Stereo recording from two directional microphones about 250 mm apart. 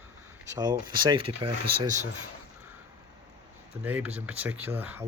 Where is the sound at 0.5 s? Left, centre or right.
Centre.